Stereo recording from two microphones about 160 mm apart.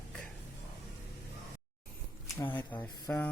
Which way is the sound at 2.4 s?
10° left (ahead or behind).